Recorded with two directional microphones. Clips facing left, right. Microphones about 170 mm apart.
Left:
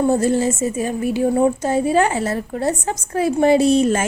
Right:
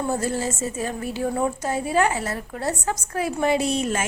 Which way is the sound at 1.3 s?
30° left (ahead or behind).